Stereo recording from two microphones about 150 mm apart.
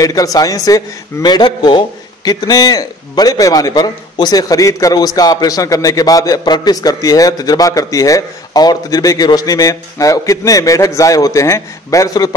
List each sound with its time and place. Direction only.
0.0 s a man's voice: 25° left (ahead or behind)